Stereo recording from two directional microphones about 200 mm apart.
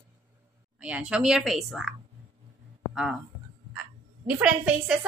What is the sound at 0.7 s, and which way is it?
A woman's voice, 5° right (ahead or behind).